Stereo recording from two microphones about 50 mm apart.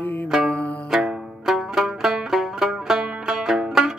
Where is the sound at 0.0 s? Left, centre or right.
Left.